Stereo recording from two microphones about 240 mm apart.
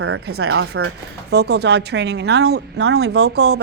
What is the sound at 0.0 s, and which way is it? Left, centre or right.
Speech, right.